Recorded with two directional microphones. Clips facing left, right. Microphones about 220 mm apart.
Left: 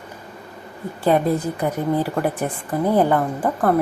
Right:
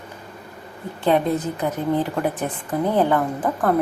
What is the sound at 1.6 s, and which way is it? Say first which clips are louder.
A woman's voice: even; 10° left (ahead or behind).